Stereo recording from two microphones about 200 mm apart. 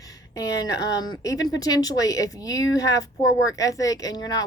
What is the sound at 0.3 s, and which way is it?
Speech, 15° left (ahead or behind).